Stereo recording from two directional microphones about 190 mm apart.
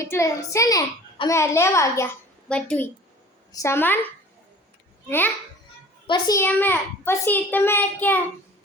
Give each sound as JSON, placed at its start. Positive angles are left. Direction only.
{"t": 0.0, "sound": "a child's voice", "side_deg": 15}
{"t": 5.0, "sound": "a child's voice", "side_deg": 10}